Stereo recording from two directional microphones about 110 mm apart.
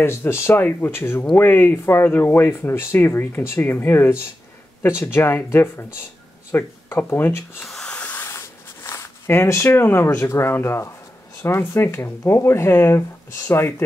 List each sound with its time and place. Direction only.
0.0 s speech: 25° left (ahead or behind)
7.6 s a sound: 5° left (ahead or behind)
8.3 s speech: 25° left (ahead or behind)